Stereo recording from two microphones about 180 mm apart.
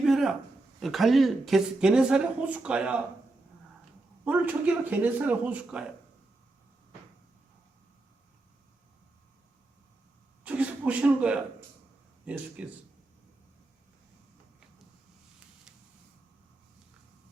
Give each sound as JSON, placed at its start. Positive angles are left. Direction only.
{"t": 0.0, "sound": "a sound", "side_deg": 0}
{"t": 0.8, "sound": "a woman's voice", "side_deg": 0}
{"t": 4.3, "sound": "speech", "side_deg": -10}
{"t": 10.4, "sound": "speech", "side_deg": -10}